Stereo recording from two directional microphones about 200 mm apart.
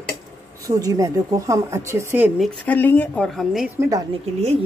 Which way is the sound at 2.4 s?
10° left (ahead or behind).